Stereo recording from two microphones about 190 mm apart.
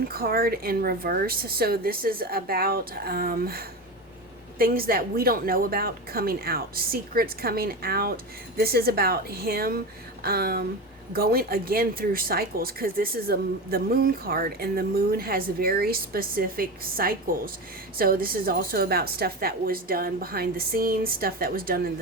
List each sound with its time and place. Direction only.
0.1 s speech: 50° right (ahead or behind)